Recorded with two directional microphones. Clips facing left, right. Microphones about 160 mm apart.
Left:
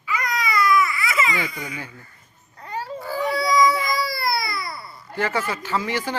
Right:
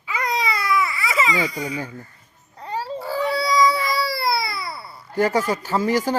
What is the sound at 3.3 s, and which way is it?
Baby cry, 30° right (ahead or behind).